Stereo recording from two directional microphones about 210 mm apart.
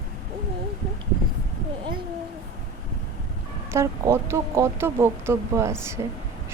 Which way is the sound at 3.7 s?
15° right (ahead or behind).